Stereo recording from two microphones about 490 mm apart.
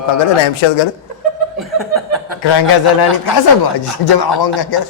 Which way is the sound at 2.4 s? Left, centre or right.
Left.